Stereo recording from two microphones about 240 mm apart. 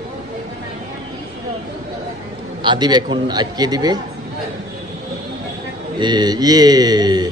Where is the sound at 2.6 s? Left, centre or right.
Centre.